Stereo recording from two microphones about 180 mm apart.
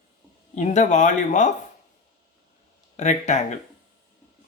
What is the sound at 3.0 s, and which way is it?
Speech, 40° left (ahead or behind).